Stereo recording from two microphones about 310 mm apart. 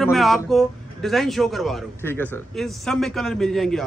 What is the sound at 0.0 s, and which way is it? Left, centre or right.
Speech, centre.